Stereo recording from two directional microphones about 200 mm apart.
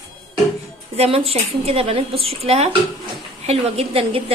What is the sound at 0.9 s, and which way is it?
A woman's voice, 30° right (ahead or behind).